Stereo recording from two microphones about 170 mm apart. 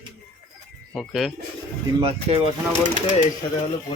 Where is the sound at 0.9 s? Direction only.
Centre (ahead or behind).